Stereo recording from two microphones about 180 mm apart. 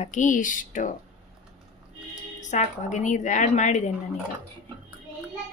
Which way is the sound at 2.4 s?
40° left (ahead or behind).